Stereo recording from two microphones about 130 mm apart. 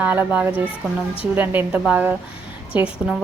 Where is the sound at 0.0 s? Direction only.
10° right (ahead or behind).